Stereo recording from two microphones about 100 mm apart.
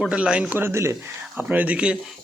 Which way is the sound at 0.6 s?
25° right (ahead or behind).